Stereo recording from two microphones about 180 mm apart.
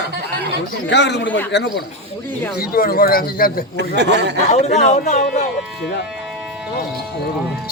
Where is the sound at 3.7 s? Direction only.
70° right (ahead or behind).